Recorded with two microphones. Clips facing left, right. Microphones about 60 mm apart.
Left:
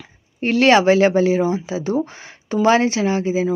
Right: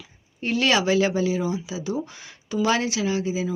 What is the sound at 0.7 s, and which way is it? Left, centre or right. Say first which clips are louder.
Speech: left 8 dB; left.